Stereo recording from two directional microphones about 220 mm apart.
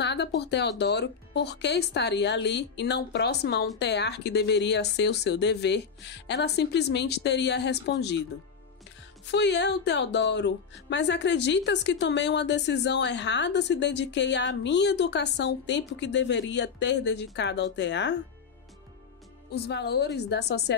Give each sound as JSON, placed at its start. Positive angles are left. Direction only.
{"t": 0.0, "sound": "a woman's voice", "side_deg": 50}
{"t": 9.3, "sound": "a woman's voice", "side_deg": 50}
{"t": 19.5, "sound": "a woman's voice", "side_deg": 50}